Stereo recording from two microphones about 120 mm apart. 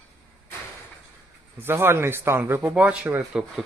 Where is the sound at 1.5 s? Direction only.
20° right (ahead or behind).